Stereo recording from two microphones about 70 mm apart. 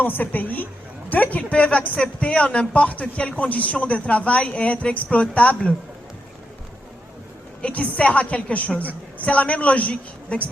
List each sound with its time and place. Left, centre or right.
0.0 s speech: left
7.6 s speech: centre